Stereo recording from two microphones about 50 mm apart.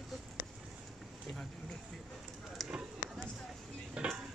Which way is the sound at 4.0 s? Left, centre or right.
Centre.